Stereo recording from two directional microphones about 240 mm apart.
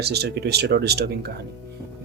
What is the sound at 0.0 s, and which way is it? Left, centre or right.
Speech, right.